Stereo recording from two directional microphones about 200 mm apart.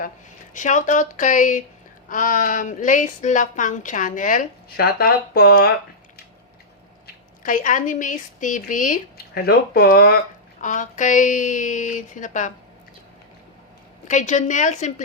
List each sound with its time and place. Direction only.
0.5 s a woman's voice: 40° left (ahead or behind)
7.4 s a woman's voice: 40° left (ahead or behind)
10.6 s a woman's voice: 40° left (ahead or behind)
14.1 s a woman's voice: 40° left (ahead or behind)